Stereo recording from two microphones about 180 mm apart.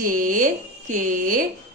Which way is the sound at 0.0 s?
50° right (ahead or behind).